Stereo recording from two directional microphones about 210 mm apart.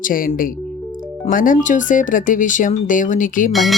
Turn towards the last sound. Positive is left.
turn(degrees=0)  # may be behind; listen again after turning